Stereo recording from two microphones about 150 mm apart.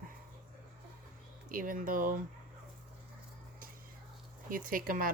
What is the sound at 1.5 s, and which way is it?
Speech, 65° right (ahead or behind).